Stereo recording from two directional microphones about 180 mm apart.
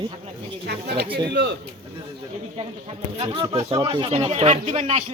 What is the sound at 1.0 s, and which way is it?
Speech, 30° right (ahead or behind).